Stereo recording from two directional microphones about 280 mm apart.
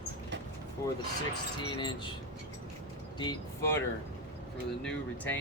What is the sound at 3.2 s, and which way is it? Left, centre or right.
Speech, centre.